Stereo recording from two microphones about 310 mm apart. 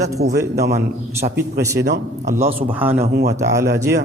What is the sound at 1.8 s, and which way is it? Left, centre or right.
Speech, right.